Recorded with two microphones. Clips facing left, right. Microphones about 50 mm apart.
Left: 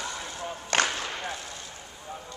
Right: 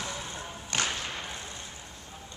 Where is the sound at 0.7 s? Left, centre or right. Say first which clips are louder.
Left 6 dB; left.